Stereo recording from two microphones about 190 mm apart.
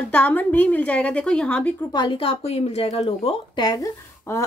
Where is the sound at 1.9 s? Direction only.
25° left (ahead or behind).